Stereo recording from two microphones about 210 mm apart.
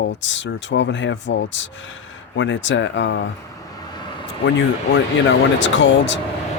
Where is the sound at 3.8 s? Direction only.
20° left (ahead or behind).